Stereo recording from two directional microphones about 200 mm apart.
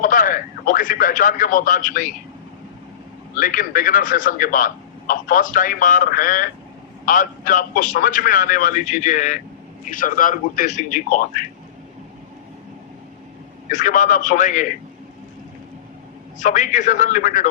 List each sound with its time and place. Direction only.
0.0 s speech: 40° left (ahead or behind)
3.3 s a man's voice: 40° left (ahead or behind)
13.7 s a man's voice: 40° left (ahead or behind)
16.4 s a man's voice: 40° left (ahead or behind)